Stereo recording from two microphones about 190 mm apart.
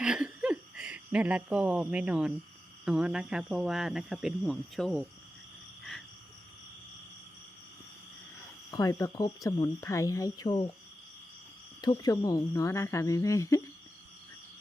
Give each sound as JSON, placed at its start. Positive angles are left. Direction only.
{"t": 0.0, "sound": "speech", "side_deg": -5}
{"t": 8.7, "sound": "speech", "side_deg": 15}
{"t": 11.8, "sound": "speech", "side_deg": 20}